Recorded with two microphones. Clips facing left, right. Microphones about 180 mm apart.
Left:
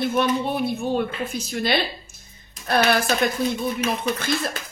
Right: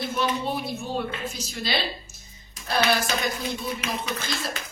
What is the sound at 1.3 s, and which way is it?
A woman's voice, 55° left (ahead or behind).